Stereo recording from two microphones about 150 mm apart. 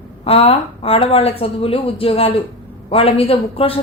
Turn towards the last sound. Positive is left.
turn(degrees=40)  # may be behind; listen again after turning